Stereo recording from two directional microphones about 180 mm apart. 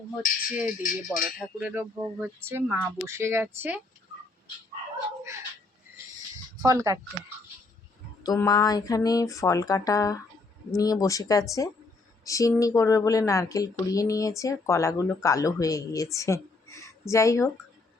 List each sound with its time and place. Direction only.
0.8 s speech: 50° left (ahead or behind)
1.4 s speech: 10° right (ahead or behind)
6.7 s speech: 20° right (ahead or behind)
8.2 s a sound: 20° left (ahead or behind)
12.2 s a woman's voice: 20° left (ahead or behind)